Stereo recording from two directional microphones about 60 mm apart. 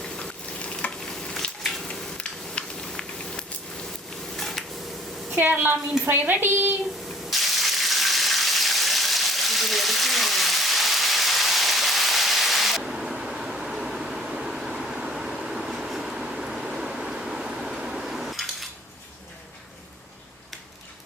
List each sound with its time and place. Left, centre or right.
0.0 s stir: centre
2.1 s a sound: centre
5.3 s a woman's voice: right
7.3 s water: centre